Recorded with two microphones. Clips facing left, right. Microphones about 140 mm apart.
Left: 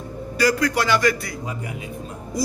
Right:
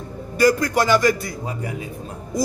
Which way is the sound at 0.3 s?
50° right (ahead or behind).